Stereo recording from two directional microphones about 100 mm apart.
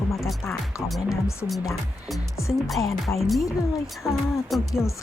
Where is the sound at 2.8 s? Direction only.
35° left (ahead or behind).